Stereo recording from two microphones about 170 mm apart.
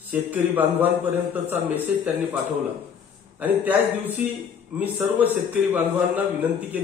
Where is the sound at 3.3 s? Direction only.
10° right (ahead or behind).